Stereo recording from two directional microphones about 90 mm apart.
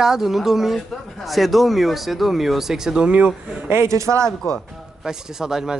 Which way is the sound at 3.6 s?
30° right (ahead or behind).